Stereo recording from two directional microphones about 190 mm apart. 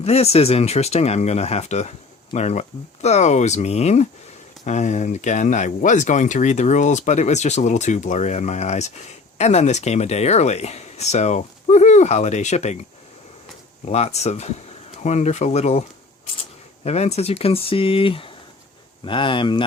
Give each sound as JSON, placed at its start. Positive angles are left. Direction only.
{"t": 0.0, "sound": "speech", "side_deg": 35}
{"t": 13.8, "sound": "speech", "side_deg": 35}